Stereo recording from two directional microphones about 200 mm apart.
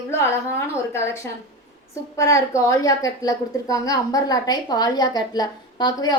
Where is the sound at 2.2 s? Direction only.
15° left (ahead or behind).